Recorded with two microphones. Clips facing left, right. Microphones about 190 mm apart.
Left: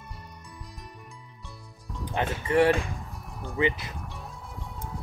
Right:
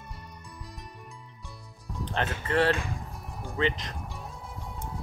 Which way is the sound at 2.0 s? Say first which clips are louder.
Left 2 dB; 10° left (ahead or behind).